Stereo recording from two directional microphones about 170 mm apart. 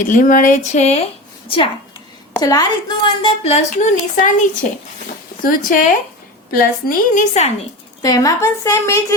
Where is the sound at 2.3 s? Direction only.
20° left (ahead or behind).